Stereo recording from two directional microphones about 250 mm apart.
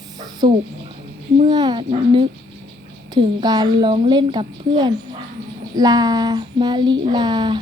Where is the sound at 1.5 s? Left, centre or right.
Centre.